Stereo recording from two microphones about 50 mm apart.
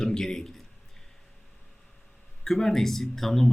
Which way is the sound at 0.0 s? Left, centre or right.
Centre.